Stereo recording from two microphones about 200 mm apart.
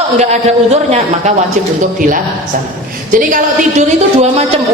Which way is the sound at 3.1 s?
40° right (ahead or behind).